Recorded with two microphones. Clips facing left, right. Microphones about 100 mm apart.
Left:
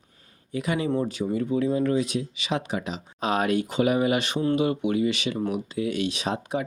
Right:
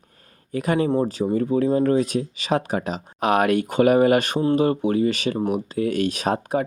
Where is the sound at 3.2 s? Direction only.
65° right (ahead or behind).